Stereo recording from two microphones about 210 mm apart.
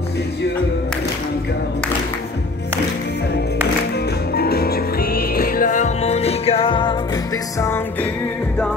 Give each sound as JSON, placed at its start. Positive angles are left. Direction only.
{"t": 4.4, "sound": "music", "side_deg": 50}
{"t": 7.6, "sound": "music", "side_deg": 10}